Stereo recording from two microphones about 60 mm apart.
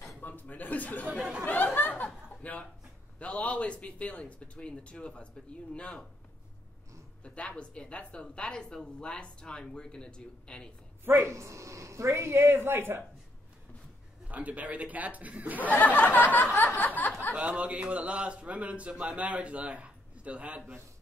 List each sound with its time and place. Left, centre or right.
0.2 s a man's voice: left
1.1 s speech: centre
1.4 s chuckle: left
3.2 s speech: left
7.2 s speech: centre
11.1 s speech: right
14.2 s a man's voice: right
15.7 s speech: left
17.4 s a man's voice: right